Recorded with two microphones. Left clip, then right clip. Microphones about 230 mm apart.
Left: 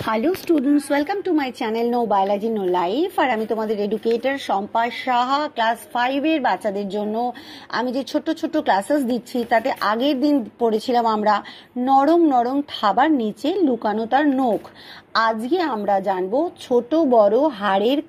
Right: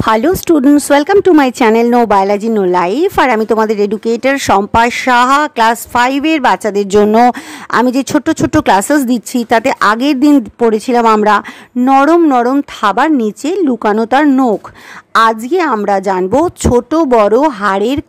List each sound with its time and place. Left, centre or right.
0.0 s speech: right
9.1 s speech: right
9.5 s speech: right
9.9 s speech: right
10.6 s speech: right